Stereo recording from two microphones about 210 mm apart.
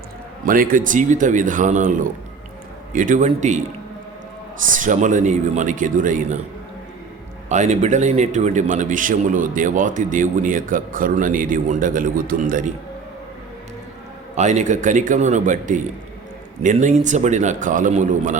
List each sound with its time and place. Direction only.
0.4 s a man's voice: 40° right (ahead or behind)
4.7 s a man's voice: 40° right (ahead or behind)
7.5 s a man's voice: 35° right (ahead or behind)
14.3 s a man's voice: 35° right (ahead or behind)